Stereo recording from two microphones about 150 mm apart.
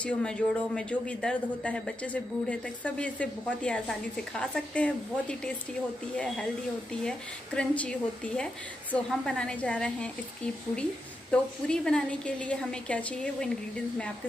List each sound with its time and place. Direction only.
0.0 s a woman's voice: 5° left (ahead or behind)